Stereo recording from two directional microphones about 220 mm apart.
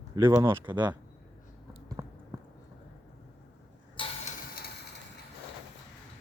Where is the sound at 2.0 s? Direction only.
15° right (ahead or behind).